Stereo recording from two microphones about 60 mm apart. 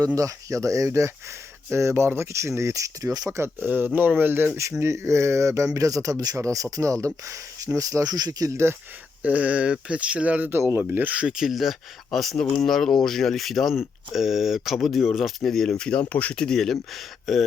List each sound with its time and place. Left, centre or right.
0.2 s speech: right
3.6 s speech: right
4.8 s speech: right
9.2 s speech: right
11.1 s speech: centre
11.3 s speech: centre